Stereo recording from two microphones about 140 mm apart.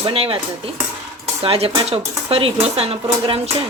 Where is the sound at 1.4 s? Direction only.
40° right (ahead or behind).